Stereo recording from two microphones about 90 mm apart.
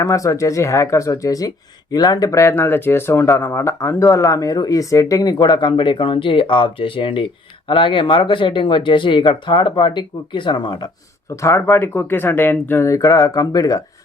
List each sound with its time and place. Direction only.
0.0 s speech: 40° left (ahead or behind)
5.5 s speech: 60° left (ahead or behind)
11.4 s speech: 25° left (ahead or behind); by 13.8 s 40° left (ahead or behind)